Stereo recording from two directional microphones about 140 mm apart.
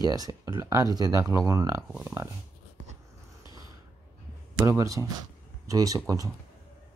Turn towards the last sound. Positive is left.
turn(degrees=-25)  # may be behind; listen again after turning